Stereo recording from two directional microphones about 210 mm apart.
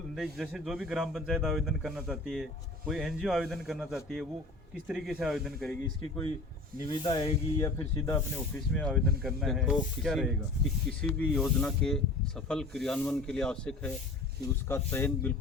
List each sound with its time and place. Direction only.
0.2 s speech: centre (ahead or behind)
6.8 s speech: 25° left (ahead or behind)
8.4 s speech: 5° left (ahead or behind)